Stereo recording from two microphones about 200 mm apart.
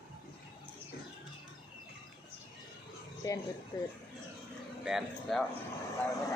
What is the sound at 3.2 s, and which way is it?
Speech, 15° left (ahead or behind).